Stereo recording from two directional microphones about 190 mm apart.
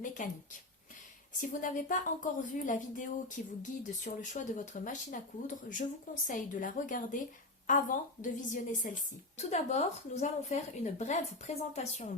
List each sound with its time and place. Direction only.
0.0 s speech: 40° left (ahead or behind)
1.4 s speech: 45° left (ahead or behind)
6.2 s speech: 45° left (ahead or behind)